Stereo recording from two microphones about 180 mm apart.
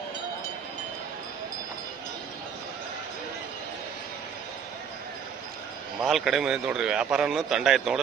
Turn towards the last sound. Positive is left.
turn(degrees=0)  # may be behind; listen again after turning